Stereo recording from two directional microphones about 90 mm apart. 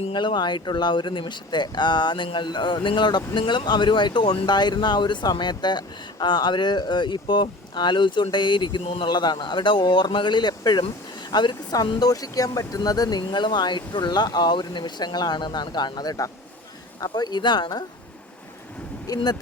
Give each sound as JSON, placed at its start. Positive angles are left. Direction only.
{"t": 0.1, "sound": "speech", "side_deg": 60}
{"t": 19.0, "sound": "speech", "side_deg": 50}